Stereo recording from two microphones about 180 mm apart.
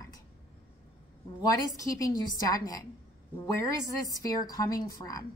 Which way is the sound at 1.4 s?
20° left (ahead or behind).